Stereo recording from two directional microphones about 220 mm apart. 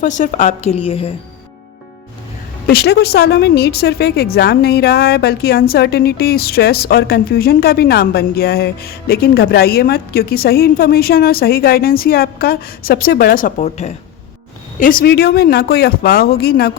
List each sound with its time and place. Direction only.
0.0 s a woman's voice: 35° left (ahead or behind)
2.6 s a woman's voice: 45° left (ahead or behind)